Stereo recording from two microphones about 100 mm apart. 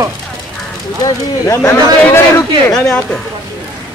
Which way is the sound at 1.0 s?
30° left (ahead or behind).